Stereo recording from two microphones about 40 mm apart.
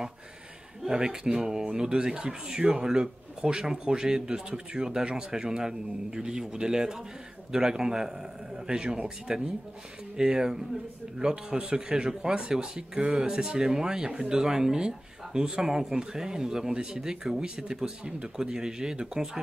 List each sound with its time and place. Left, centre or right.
0.8 s speech: centre